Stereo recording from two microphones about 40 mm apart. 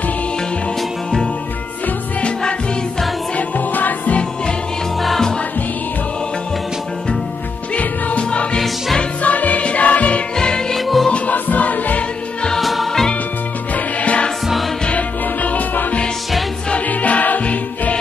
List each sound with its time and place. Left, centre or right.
3.3 s music: left
5.0 s music: centre
7.7 s music: left
9.2 s music: left
10.3 s music: centre
11.1 s music: left
11.3 s music: left
12.5 s music: centre
13.7 s music: left